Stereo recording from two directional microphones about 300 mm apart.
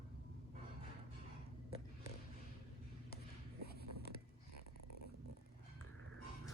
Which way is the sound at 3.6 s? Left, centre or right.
Left.